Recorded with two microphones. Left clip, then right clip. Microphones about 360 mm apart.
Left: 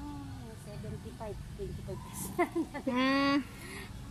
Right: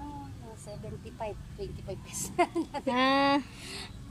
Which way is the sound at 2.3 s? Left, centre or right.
Right.